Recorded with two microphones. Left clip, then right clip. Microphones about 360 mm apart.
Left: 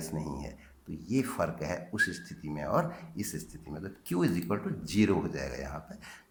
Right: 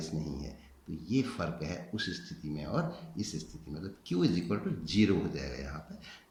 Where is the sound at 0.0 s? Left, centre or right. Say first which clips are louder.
Left 2 dB; centre.